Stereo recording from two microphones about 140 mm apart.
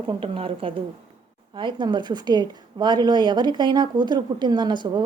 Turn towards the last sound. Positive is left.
turn(degrees=-30)  # may be behind; listen again after turning